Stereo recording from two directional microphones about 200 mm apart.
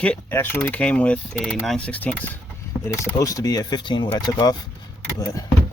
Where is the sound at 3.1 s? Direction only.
15° left (ahead or behind).